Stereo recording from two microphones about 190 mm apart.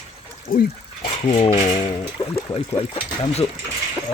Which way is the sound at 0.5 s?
25° left (ahead or behind).